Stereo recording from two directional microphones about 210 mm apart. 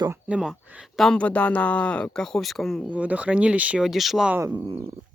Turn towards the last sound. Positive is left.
turn(degrees=-10)  # may be behind; listen again after turning